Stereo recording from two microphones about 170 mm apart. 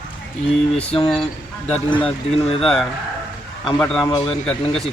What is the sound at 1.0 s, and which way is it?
Speech, 5° left (ahead or behind).